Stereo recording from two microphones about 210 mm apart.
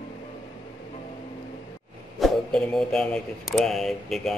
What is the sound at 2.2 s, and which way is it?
Speech, centre (ahead or behind).